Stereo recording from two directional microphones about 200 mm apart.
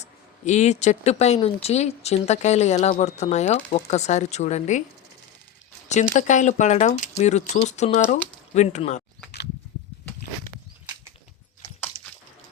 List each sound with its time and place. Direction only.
0.0 s speech: 35° left (ahead or behind)
6.1 s speech: 40° left (ahead or behind)
11.9 s a sound: 15° right (ahead or behind)